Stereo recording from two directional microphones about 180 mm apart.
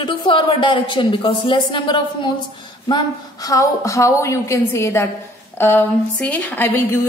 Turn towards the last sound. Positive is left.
turn(degrees=10)  # may be behind; listen again after turning